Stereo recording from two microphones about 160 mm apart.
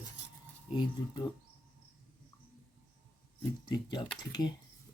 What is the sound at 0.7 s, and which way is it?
Speech, 25° left (ahead or behind).